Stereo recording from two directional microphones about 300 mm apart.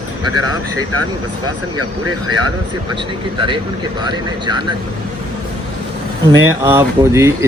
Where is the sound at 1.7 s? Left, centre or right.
Right.